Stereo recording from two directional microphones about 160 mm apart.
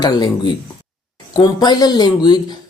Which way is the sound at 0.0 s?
25° left (ahead or behind).